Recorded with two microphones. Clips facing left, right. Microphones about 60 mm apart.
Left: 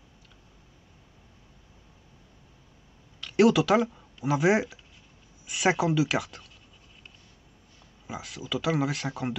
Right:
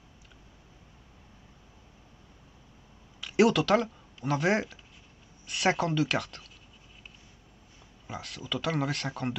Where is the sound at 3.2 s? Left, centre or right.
Centre.